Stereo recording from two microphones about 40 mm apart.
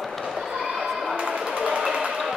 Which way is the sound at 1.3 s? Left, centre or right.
Right.